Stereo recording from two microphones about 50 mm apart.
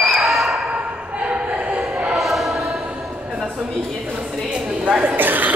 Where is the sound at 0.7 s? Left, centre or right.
Right.